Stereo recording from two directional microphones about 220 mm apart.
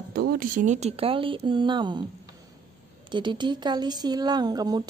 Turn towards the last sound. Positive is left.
turn(degrees=-15)  # may be behind; listen again after turning